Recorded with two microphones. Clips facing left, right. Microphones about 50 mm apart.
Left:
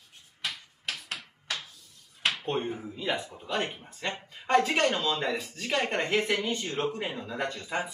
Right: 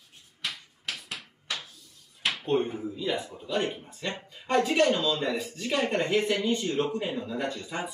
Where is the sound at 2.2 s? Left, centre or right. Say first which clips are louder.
Left 1 dB; centre.